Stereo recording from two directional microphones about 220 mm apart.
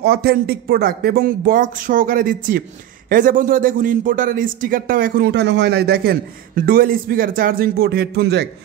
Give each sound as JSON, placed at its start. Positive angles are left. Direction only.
{"t": 0.0, "sound": "a man's voice", "side_deg": -45}